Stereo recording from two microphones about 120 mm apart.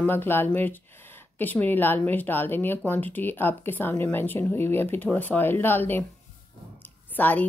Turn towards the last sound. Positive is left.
turn(degrees=15)  # may be behind; listen again after turning